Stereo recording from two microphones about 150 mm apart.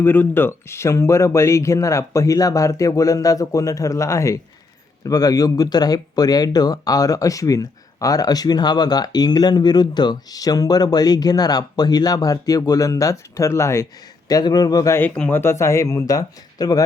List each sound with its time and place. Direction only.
0.0 s speech: 15° left (ahead or behind)